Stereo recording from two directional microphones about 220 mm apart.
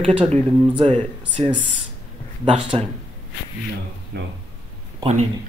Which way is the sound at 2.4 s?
25° right (ahead or behind).